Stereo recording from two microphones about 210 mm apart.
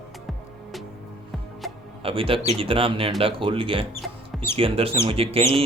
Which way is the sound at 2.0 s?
25° right (ahead or behind).